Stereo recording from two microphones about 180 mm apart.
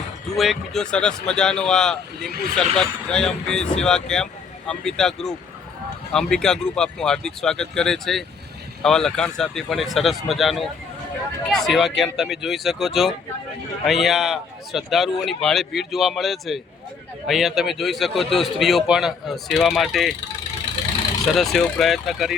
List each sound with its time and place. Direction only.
0.3 s a man's voice: centre (ahead or behind)
2.3 s speech: 55° right (ahead or behind)
2.7 s a man's voice: 5° left (ahead or behind)
21.3 s a man's voice: centre (ahead or behind)